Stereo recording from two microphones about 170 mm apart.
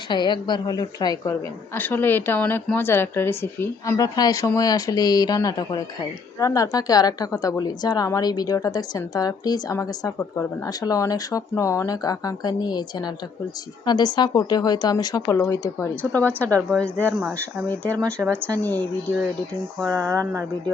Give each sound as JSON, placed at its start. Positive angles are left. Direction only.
{"t": 0.1, "sound": "a woman's voice", "side_deg": 25}
{"t": 19.9, "sound": "speech", "side_deg": -15}